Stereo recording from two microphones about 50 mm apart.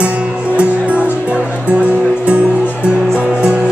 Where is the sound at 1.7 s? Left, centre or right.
Right.